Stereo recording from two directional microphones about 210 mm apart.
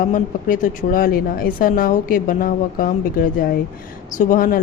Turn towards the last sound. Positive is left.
turn(degrees=40)  # may be behind; listen again after turning